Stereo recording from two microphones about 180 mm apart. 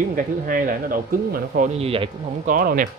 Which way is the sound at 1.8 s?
30° right (ahead or behind).